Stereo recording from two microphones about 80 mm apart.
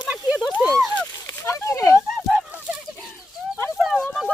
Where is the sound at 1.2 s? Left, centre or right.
Left.